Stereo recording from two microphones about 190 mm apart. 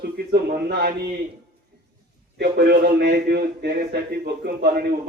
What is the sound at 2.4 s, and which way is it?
A man's voice, 60° right (ahead or behind).